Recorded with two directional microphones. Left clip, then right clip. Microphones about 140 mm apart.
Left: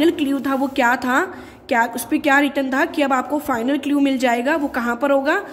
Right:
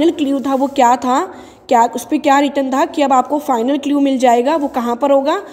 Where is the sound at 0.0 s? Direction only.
25° right (ahead or behind).